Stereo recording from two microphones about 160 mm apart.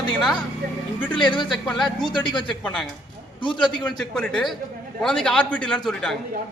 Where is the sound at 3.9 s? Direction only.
5° left (ahead or behind).